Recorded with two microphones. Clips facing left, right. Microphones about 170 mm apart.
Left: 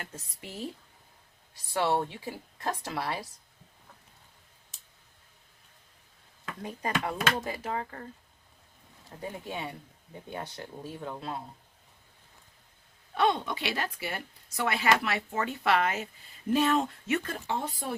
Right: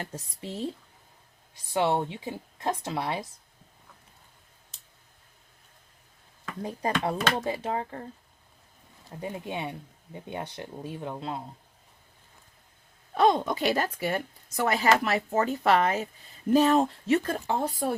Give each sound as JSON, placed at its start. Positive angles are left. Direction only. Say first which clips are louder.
{"t": 0.0, "sound": "speech", "louder": "right 6 dB", "side_deg": -30}
{"t": 1.7, "sound": "speech", "louder": "right 2 dB", "side_deg": -20}
{"t": 6.6, "sound": "a woman's voice", "louder": "right 4 dB", "side_deg": -30}
{"t": 9.1, "sound": "speech", "louder": "right 3 dB", "side_deg": -20}
{"t": 13.1, "sound": "a woman's voice", "louder": "right 5 dB", "side_deg": -40}